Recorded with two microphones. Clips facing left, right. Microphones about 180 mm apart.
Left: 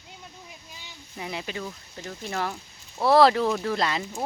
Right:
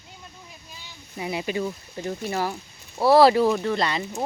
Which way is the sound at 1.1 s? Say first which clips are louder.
Right 6 dB; 10° right (ahead or behind).